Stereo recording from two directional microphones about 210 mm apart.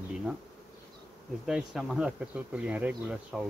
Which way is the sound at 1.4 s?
Centre (ahead or behind).